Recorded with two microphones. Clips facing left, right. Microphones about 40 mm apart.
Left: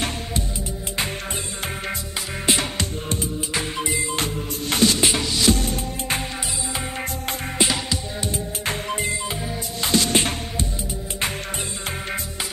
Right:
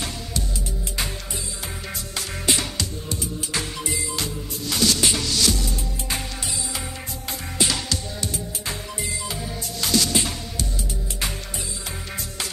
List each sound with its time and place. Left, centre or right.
2.4 s music: left
5.5 s music: left
7.5 s music: centre
8.6 s music: left